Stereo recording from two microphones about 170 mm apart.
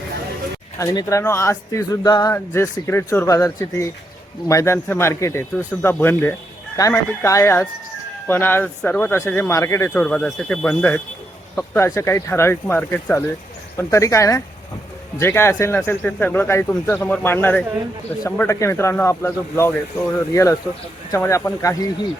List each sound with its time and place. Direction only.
0.8 s speech: 20° left (ahead or behind)